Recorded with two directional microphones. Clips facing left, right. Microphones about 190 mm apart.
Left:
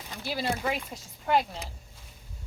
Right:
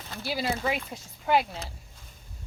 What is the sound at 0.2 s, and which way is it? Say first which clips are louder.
Speech: right 1 dB; 5° right (ahead or behind).